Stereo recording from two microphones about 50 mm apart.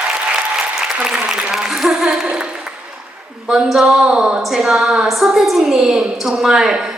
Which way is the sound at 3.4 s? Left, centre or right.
Centre.